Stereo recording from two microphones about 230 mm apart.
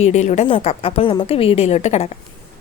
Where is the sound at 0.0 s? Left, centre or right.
Left.